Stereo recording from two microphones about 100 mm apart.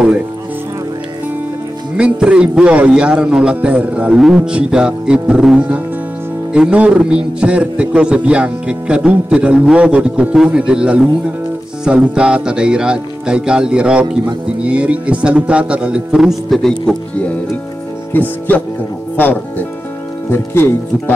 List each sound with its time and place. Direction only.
2.0 s speech: 10° right (ahead or behind)
18.1 s speech: 20° left (ahead or behind)
20.2 s speech: 20° left (ahead or behind)